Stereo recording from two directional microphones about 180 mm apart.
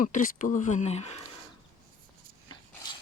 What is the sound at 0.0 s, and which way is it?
Speech, 45° left (ahead or behind).